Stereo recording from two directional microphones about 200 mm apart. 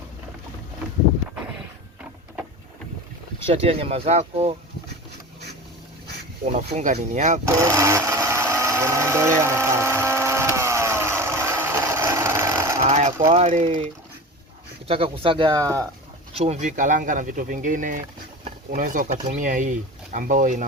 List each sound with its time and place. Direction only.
3.4 s speech: 30° right (ahead or behind)
7.1 s speech: 35° right (ahead or behind)
7.4 s sewing machine: 15° right (ahead or behind)
12.9 s speech: 35° right (ahead or behind); by 15.9 s 15° right (ahead or behind)
16.3 s speech: 35° right (ahead or behind)